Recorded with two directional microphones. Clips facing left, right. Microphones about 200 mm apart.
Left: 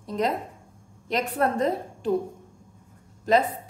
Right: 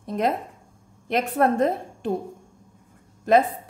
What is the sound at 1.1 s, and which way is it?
A woman's voice, 55° right (ahead or behind).